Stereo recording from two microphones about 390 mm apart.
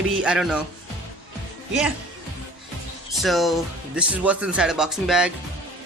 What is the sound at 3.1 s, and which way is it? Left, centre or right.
Speech, centre.